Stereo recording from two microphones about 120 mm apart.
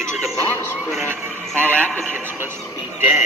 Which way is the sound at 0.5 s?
20° left (ahead or behind).